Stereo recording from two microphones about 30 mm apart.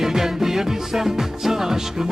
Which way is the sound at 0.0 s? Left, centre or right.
Centre.